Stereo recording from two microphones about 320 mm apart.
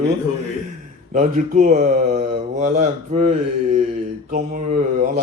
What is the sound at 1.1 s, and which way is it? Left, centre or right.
Speech, right.